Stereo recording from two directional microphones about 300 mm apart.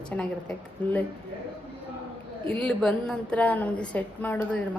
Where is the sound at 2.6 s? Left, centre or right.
Centre.